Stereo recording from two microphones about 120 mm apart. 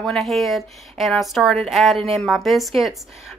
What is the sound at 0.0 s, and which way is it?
A woman's voice, 5° left (ahead or behind).